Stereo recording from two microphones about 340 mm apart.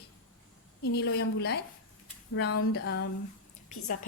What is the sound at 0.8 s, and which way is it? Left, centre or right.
A woman's voice, left.